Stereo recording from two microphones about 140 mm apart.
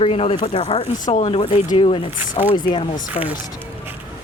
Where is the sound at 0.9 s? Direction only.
60° left (ahead or behind).